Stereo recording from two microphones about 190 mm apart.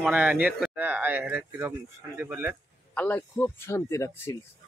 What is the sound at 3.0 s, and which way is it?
Speech, 10° left (ahead or behind).